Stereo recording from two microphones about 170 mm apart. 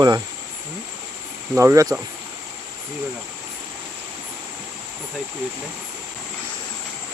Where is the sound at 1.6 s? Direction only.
20° right (ahead or behind).